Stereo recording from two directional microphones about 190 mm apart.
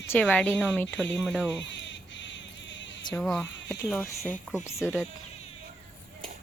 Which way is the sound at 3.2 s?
5° left (ahead or behind).